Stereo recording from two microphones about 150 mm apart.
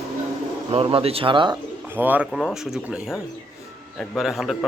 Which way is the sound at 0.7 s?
40° right (ahead or behind).